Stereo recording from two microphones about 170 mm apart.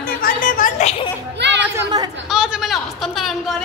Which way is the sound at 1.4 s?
90° right.